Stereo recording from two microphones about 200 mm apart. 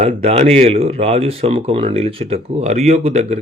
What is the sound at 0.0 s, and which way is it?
Speech, 30° right (ahead or behind).